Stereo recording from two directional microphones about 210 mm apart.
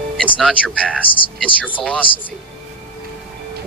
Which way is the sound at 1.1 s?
25° left (ahead or behind).